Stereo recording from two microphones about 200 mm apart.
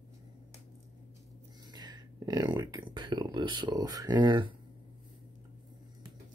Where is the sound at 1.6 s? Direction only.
20° right (ahead or behind).